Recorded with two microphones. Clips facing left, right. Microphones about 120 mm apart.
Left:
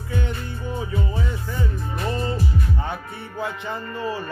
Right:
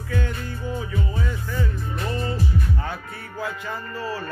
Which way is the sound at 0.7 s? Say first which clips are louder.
Left 3 dB; 25° left (ahead or behind).